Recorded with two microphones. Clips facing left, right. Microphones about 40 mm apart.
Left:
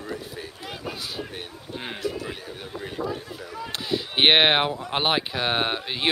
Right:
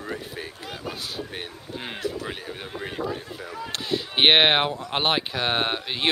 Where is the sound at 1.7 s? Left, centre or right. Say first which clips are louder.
Even; centre.